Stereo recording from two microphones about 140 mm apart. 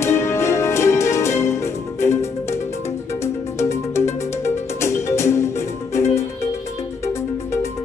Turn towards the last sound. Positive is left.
turn(degrees=20)  # may be behind; listen again after turning